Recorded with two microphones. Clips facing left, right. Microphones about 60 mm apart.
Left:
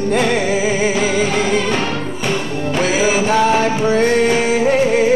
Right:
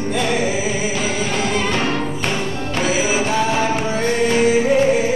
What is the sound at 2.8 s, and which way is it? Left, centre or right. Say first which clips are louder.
Music: left 3 dB; left.